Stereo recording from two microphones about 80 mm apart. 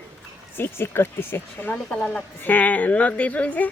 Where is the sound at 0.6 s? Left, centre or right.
Left.